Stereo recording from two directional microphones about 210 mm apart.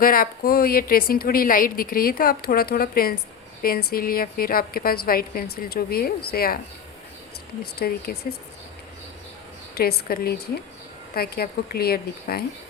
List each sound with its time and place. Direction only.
0.0 s a woman's voice: 45° left (ahead or behind)
7.6 s a woman's voice: 50° left (ahead or behind)
9.7 s a woman's voice: 45° left (ahead or behind)